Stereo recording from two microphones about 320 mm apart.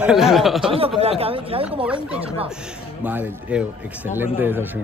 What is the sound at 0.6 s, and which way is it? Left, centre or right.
Speech, centre.